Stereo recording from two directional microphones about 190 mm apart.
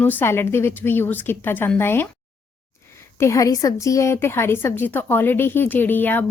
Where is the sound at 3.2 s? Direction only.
15° left (ahead or behind).